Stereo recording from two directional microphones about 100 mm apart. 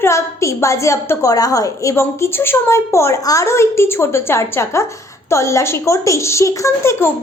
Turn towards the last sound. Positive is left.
turn(degrees=30)  # may be behind; listen again after turning